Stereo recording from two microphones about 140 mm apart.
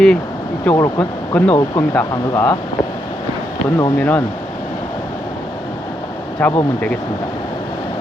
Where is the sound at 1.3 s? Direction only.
10° left (ahead or behind).